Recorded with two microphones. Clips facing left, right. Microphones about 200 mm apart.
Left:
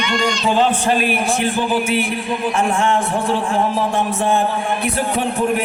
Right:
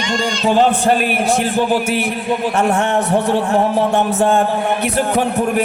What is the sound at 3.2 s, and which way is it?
Speech, 70° right (ahead or behind).